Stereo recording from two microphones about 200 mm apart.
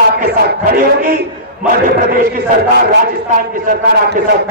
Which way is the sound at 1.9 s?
50° right (ahead or behind).